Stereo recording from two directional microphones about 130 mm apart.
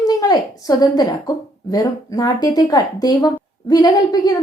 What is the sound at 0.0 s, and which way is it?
Speech, 30° left (ahead or behind).